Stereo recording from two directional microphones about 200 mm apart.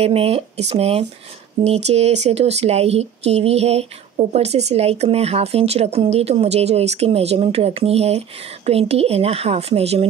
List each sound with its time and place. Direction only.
0.0 s speech: 30° right (ahead or behind)